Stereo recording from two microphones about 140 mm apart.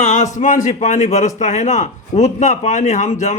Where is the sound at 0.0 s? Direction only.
60° left (ahead or behind).